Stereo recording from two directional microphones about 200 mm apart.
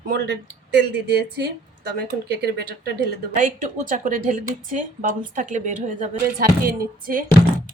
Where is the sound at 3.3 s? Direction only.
40° right (ahead or behind).